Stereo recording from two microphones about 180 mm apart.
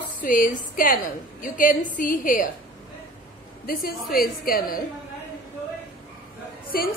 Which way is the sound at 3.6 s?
55° left (ahead or behind).